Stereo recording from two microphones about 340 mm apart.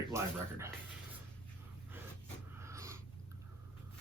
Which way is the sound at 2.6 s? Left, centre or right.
Centre.